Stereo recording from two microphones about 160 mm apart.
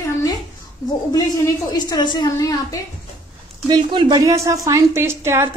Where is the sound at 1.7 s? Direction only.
25° left (ahead or behind).